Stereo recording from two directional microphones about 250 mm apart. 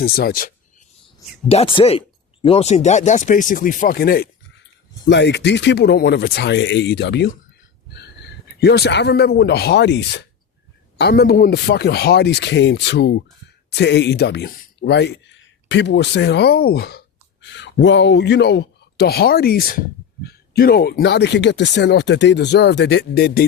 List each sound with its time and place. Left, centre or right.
0.0 s speech: left
1.5 s speech: left